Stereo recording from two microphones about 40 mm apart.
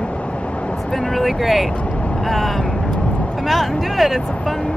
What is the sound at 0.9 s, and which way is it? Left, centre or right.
Speech, centre.